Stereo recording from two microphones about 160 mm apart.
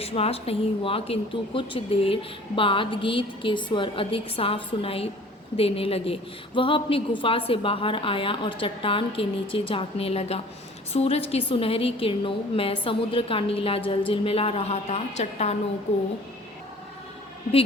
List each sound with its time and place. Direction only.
0.0 s a woman's voice: 40° left (ahead or behind)